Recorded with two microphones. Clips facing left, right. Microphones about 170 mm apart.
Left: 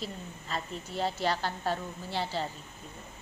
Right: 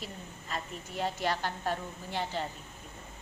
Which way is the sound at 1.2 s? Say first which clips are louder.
Left 1 dB; 35° left (ahead or behind).